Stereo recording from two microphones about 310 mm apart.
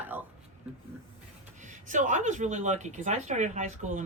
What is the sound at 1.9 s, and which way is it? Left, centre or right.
Speech, right.